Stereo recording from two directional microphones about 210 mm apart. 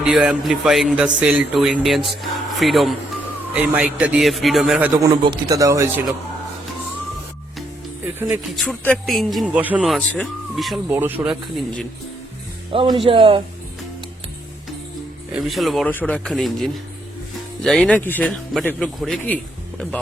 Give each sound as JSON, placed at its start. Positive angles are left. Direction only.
{"t": 0.0, "sound": "a man's voice", "side_deg": -5}
{"t": 4.9, "sound": "speech", "side_deg": -20}
{"t": 8.4, "sound": "a man's voice", "side_deg": 0}
{"t": 12.7, "sound": "a man's voice", "side_deg": -25}
{"t": 15.3, "sound": "a man's voice", "side_deg": 0}